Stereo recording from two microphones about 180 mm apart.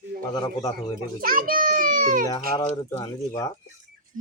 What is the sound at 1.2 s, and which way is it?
A child's voice, 50° right (ahead or behind).